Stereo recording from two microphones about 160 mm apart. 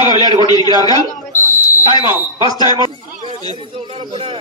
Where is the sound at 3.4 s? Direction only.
40° right (ahead or behind).